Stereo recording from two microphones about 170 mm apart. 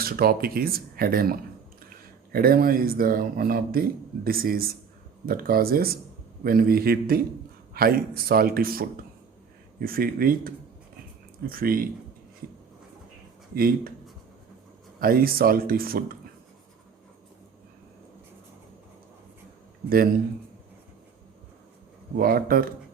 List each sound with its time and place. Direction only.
0.0 s speech: 60° right (ahead or behind)
13.6 s speech: 60° right (ahead or behind)
15.0 s speech: 60° right (ahead or behind)
22.2 s speech: 60° right (ahead or behind)